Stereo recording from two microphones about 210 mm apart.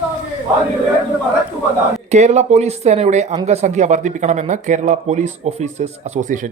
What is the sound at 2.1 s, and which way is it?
A man's voice, 35° right (ahead or behind).